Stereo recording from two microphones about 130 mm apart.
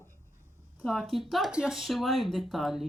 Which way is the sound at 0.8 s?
Centre (ahead or behind).